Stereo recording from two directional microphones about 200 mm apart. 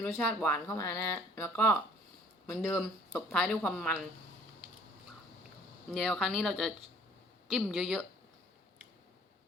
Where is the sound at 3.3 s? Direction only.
5° left (ahead or behind).